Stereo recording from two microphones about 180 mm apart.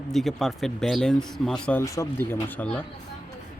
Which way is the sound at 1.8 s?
15° left (ahead or behind).